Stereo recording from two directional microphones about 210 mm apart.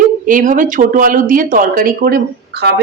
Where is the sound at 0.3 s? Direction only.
40° right (ahead or behind).